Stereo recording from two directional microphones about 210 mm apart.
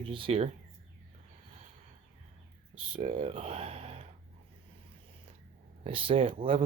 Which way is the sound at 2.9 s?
30° right (ahead or behind).